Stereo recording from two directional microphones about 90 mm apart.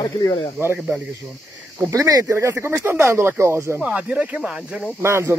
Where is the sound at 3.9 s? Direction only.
15° right (ahead or behind).